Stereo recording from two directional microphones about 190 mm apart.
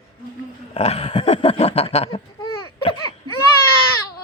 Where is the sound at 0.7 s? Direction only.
35° left (ahead or behind).